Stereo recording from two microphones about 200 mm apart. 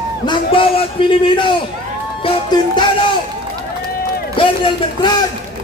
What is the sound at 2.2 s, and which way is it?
Music, 25° left (ahead or behind).